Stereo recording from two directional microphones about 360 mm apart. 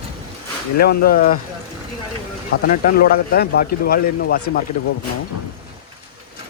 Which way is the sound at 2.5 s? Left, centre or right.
Left.